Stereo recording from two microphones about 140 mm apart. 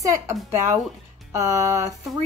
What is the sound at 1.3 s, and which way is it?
Speech, 20° right (ahead or behind).